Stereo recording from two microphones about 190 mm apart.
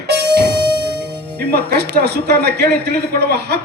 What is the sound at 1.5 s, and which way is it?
Speech, 60° right (ahead or behind).